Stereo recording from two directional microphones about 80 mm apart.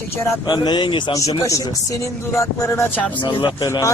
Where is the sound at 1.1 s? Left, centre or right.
Left.